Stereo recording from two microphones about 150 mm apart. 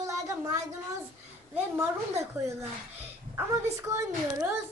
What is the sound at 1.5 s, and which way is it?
Speech, 15° right (ahead or behind).